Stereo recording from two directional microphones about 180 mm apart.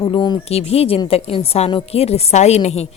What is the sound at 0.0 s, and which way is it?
A woman's voice, 25° left (ahead or behind).